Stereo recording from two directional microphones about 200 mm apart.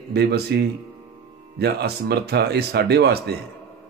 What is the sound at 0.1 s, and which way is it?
A man's voice, 55° right (ahead or behind).